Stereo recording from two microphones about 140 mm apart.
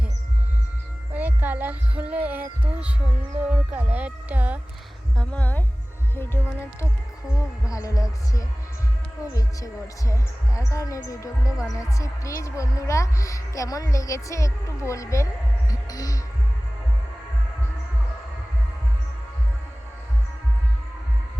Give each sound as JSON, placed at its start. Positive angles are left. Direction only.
{"t": 1.1, "sound": "music", "side_deg": -10}
{"t": 3.4, "sound": "speech", "side_deg": -10}
{"t": 5.1, "sound": "a woman's voice", "side_deg": 10}
{"t": 15.7, "sound": "music", "side_deg": 25}